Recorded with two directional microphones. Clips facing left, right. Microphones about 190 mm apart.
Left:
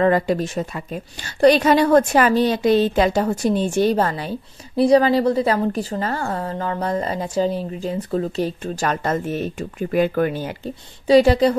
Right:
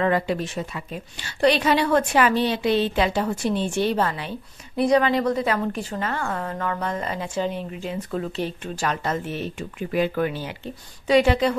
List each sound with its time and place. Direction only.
0.0 s a woman's voice: 40° left (ahead or behind)